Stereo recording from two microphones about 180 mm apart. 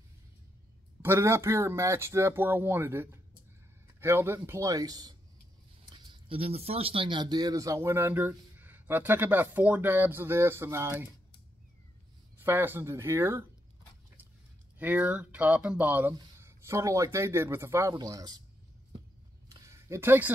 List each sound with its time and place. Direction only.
1.0 s speech: 15° right (ahead or behind)
12.4 s speech: 10° right (ahead or behind)
14.8 s speech: 10° right (ahead or behind)
19.5 s a sound: 15° right (ahead or behind)